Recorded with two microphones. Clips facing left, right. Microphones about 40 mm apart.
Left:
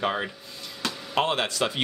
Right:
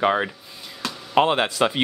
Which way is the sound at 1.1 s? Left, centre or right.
Right.